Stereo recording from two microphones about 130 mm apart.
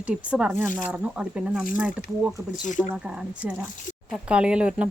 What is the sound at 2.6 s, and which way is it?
Speech, 70° left (ahead or behind).